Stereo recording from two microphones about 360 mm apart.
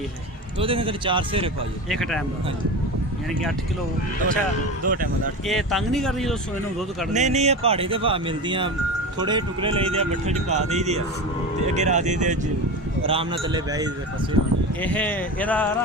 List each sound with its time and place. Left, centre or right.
0.6 s speech: centre
1.9 s speech: centre
4.9 s speech: right
5.5 s speech: centre
7.1 s speech: centre
14.8 s speech: centre